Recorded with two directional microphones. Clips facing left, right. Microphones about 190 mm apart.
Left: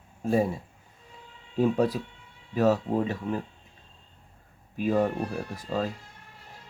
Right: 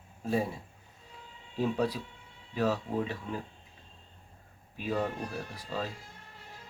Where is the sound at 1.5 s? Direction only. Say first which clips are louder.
Left 6 dB; 50° left (ahead or behind).